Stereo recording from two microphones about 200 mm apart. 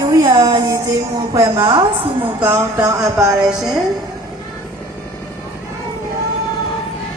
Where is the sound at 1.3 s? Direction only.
15° right (ahead or behind).